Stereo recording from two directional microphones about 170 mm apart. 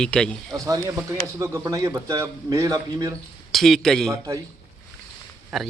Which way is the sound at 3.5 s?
Centre (ahead or behind).